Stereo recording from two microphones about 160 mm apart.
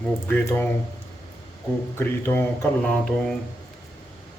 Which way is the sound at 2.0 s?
15° left (ahead or behind).